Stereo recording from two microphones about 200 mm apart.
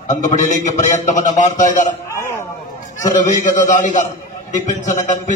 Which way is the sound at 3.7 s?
40° left (ahead or behind).